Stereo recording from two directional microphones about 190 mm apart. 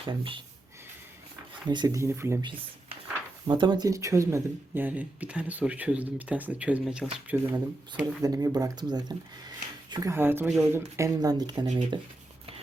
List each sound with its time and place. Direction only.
0.0 s speech: 25° right (ahead or behind)
1.6 s speech: 25° right (ahead or behind)
3.4 s speech: 25° right (ahead or behind)